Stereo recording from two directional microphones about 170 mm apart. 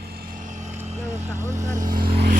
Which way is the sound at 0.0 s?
65° right (ahead or behind).